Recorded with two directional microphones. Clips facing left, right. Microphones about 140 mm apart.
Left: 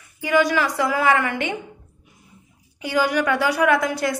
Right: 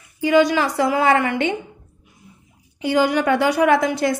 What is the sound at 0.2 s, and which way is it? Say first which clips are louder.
A woman's voice: right 3 dB; 25° right (ahead or behind).